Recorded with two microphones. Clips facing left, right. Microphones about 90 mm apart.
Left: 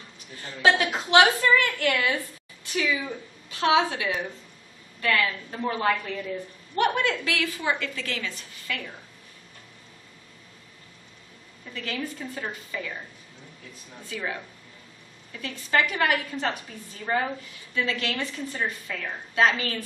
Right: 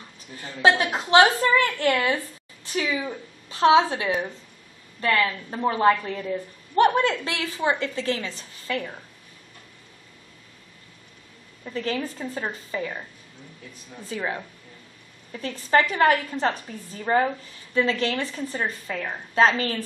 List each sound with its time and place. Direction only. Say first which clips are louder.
0.6 s a woman's voice: right 2 dB; 35° right (ahead or behind)
11.7 s a woman's voice: right 5 dB; 35° right (ahead or behind)
14.0 s a woman's voice: right 3 dB; 35° right (ahead or behind)
15.4 s a woman's voice: right 4 dB; 35° right (ahead or behind)